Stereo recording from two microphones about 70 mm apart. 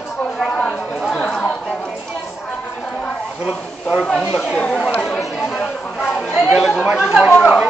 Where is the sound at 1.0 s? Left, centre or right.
Centre.